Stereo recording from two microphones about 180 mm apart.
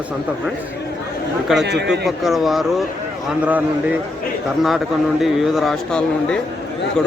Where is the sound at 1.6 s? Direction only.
70° right (ahead or behind).